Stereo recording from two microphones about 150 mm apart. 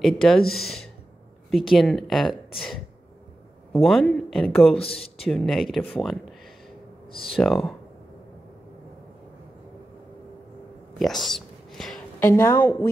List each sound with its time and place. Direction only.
0.0 s speech: 5° left (ahead or behind)
3.7 s speech: centre (ahead or behind)
4.7 s speech: 40° left (ahead or behind)
5.3 s speech: centre (ahead or behind)
7.3 s speech: centre (ahead or behind)
11.0 s a sound: centre (ahead or behind)
12.3 s a woman's voice: 15° left (ahead or behind)